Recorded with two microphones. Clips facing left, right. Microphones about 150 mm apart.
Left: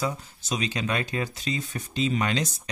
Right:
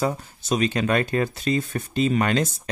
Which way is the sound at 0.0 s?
55° right (ahead or behind).